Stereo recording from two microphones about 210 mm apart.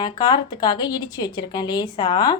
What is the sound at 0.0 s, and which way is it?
A woman's voice, 20° left (ahead or behind).